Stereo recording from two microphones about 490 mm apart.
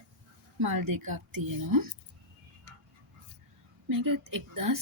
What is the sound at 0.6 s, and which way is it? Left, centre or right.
A woman's voice, right.